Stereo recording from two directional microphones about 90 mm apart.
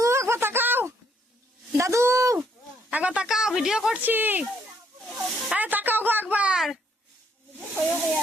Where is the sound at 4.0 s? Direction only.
20° right (ahead or behind).